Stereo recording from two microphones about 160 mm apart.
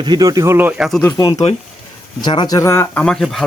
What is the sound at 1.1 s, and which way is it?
Speech, 25° left (ahead or behind).